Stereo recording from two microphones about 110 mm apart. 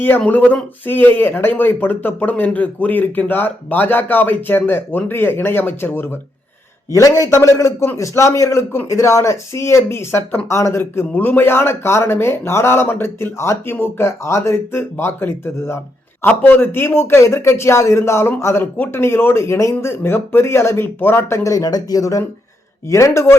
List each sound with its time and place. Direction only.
0.3 s speech: 15° left (ahead or behind)
6.9 s speech: 30° left (ahead or behind)